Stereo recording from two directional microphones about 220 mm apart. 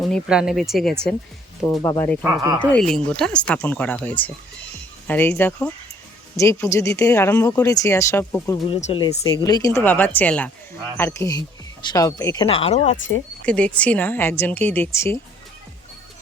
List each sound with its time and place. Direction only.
0.0 s speech: centre (ahead or behind)
1.6 s speech: 15° left (ahead or behind)
2.2 s speech: 10° right (ahead or behind)
2.7 s speech: 5° left (ahead or behind); by 13.0 s 30° left (ahead or behind)
13.4 s speech: 5° left (ahead or behind)